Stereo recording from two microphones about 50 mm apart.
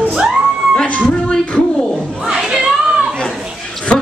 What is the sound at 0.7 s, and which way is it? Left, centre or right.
Music, left.